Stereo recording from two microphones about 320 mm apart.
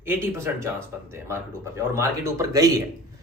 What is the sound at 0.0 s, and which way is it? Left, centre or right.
Speech, centre.